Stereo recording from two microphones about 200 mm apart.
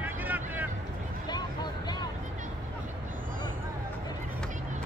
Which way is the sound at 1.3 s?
20° left (ahead or behind).